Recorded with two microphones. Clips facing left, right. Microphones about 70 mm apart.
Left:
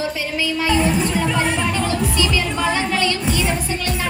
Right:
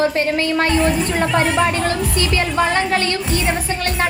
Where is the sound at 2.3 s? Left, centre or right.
Right.